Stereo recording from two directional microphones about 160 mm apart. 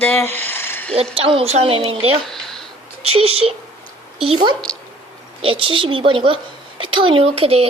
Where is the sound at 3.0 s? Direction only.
40° right (ahead or behind).